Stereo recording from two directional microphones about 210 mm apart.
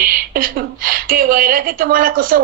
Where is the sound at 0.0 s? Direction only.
45° right (ahead or behind).